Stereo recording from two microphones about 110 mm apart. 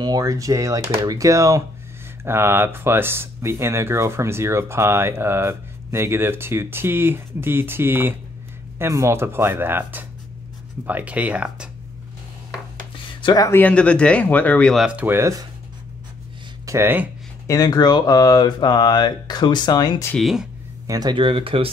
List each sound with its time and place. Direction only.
0.2 s speech: 30° right (ahead or behind); by 11.7 s 10° right (ahead or behind)
12.9 s a sound: 50° left (ahead or behind)
13.5 s speech: 15° left (ahead or behind)
14.9 s speech: 15° right (ahead or behind)
15.1 s speech: 30° right (ahead or behind)
16.6 s speech: 25° right (ahead or behind)
17.5 s speech: 35° left (ahead or behind)
20.2 s speech: centre (ahead or behind)
20.8 s speech: 30° right (ahead or behind)
21.1 s speech: 50° right (ahead or behind)